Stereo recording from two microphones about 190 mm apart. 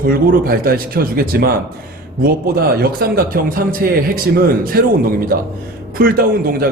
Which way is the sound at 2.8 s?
50° right (ahead or behind).